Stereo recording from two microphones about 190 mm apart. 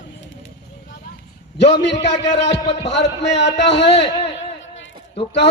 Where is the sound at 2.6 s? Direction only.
30° left (ahead or behind).